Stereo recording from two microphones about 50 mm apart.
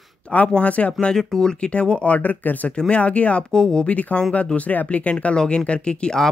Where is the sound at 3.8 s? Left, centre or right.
Left.